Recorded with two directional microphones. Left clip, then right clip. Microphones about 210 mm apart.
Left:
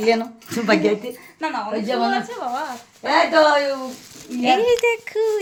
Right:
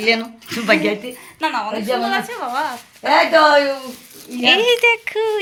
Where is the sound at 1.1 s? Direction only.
10° right (ahead or behind).